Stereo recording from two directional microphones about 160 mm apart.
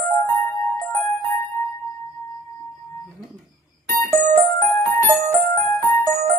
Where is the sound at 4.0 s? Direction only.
20° left (ahead or behind).